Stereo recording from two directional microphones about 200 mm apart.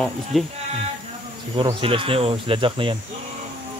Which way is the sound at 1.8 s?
25° right (ahead or behind).